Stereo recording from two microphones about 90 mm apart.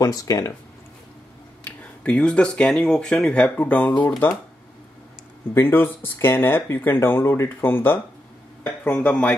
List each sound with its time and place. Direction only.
0.0 s speech: 40° left (ahead or behind)
1.8 s speech: 15° left (ahead or behind)
5.5 s speech: 25° left (ahead or behind)